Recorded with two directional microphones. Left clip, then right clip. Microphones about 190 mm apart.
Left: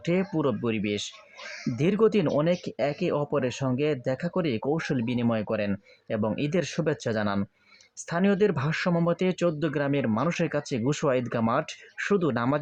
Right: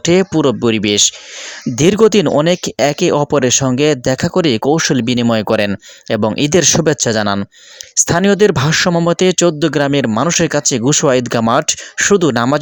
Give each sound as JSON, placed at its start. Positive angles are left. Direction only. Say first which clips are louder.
{"t": 0.0, "sound": "speech", "louder": "right 14 dB", "side_deg": -45}